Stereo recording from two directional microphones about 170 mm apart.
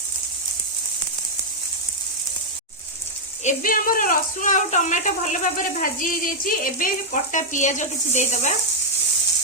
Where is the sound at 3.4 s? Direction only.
55° left (ahead or behind).